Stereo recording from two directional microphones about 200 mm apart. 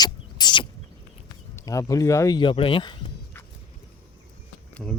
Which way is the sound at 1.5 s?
15° left (ahead or behind).